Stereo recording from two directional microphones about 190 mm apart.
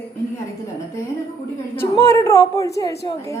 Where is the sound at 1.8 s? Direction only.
15° left (ahead or behind).